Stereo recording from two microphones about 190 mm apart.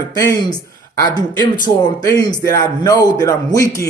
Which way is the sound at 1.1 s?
20° left (ahead or behind).